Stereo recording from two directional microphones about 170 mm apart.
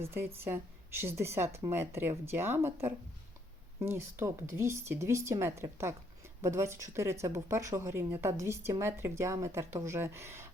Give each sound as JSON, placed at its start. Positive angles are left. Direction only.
{"t": 0.0, "sound": "speech", "side_deg": -15}